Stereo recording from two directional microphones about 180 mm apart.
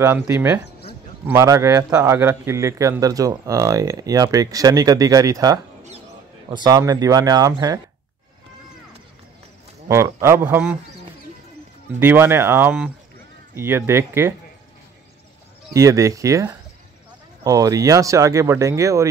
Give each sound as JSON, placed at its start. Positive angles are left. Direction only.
{"t": 0.0, "sound": "a man's voice", "side_deg": -15}
{"t": 9.8, "sound": "speech", "side_deg": -15}
{"t": 12.0, "sound": "speech", "side_deg": -10}
{"t": 15.7, "sound": "speech", "side_deg": -15}